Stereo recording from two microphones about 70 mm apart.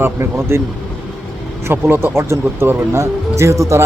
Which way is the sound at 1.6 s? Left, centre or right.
Right.